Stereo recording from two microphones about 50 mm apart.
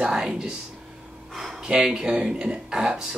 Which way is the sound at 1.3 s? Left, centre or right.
Centre.